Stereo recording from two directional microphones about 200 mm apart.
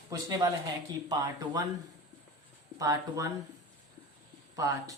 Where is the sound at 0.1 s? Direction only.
20° right (ahead or behind).